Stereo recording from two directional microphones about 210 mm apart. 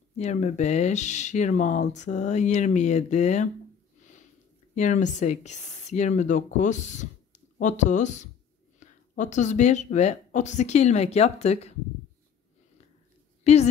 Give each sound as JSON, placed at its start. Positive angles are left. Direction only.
{"t": 0.2, "sound": "speech", "side_deg": 35}
{"t": 4.7, "sound": "speech", "side_deg": 35}
{"t": 13.4, "sound": "a sound", "side_deg": 30}